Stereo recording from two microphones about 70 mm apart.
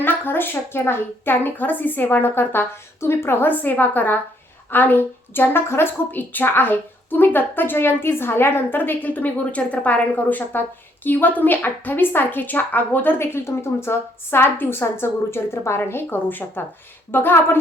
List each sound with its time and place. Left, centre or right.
0.0 s a woman's voice: left